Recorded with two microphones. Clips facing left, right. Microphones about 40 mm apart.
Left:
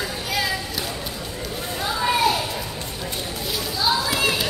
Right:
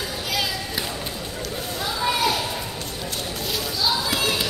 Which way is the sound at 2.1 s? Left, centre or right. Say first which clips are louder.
Left 3 dB; left.